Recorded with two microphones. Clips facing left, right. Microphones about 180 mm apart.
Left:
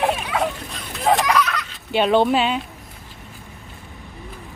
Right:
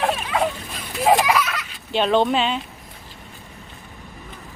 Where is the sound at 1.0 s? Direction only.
5° right (ahead or behind).